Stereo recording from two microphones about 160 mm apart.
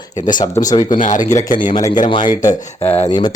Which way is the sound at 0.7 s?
25° left (ahead or behind).